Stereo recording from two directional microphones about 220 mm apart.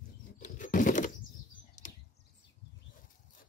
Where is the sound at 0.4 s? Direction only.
35° left (ahead or behind).